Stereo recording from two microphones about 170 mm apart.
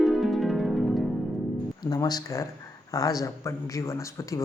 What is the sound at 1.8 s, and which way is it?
Speech, 25° left (ahead or behind).